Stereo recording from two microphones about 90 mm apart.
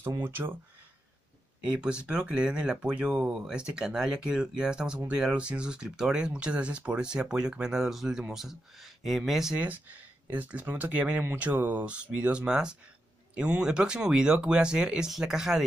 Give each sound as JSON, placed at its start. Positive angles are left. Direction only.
{"t": 0.2, "sound": "speech", "side_deg": -25}
{"t": 1.6, "sound": "speech", "side_deg": -10}
{"t": 10.3, "sound": "speech", "side_deg": -20}